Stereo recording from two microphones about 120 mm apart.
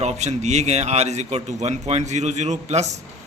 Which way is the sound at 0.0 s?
70° right (ahead or behind).